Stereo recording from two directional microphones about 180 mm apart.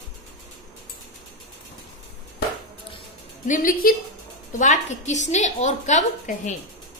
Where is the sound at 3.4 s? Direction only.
45° left (ahead or behind).